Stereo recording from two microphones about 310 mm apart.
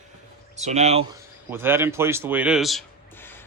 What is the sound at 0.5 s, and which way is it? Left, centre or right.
Speech, right.